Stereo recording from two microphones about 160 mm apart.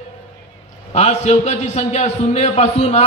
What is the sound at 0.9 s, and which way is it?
A man's voice, 45° left (ahead or behind).